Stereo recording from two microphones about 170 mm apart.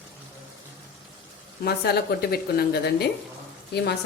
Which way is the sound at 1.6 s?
65° left (ahead or behind).